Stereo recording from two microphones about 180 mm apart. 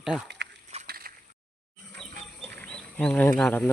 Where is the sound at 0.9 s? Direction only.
55° right (ahead or behind).